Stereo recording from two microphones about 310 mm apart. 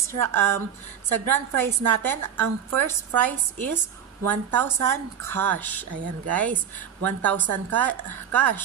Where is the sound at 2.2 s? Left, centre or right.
Right.